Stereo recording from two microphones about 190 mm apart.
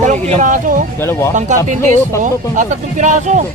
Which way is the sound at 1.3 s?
40° right (ahead or behind).